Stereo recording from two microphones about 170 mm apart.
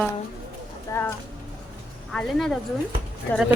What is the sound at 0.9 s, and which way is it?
Speech, 15° left (ahead or behind).